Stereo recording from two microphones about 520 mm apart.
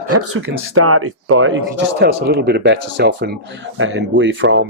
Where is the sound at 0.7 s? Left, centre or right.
Right.